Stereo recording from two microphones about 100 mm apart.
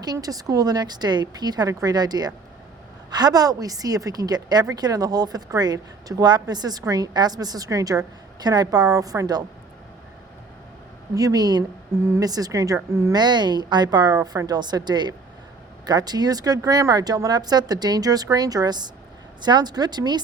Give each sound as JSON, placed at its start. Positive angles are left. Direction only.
{"t": 0.0, "sound": "a woman's voice", "side_deg": -40}
{"t": 11.1, "sound": "a woman's voice", "side_deg": -35}
{"t": 13.1, "sound": "a woman's voice", "side_deg": -45}